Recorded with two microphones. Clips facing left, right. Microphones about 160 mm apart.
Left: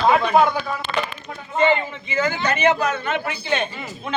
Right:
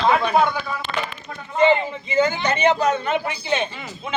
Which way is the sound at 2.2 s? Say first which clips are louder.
Right 1 dB; 20° right (ahead or behind).